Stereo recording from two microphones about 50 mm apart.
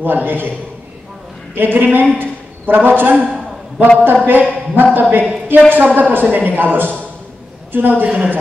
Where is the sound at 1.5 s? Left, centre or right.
Right.